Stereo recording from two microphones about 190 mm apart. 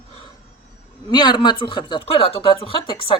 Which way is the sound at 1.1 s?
25° left (ahead or behind).